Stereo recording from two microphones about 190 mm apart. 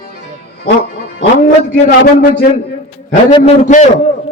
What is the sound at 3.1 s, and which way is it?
Speech, 35° left (ahead or behind).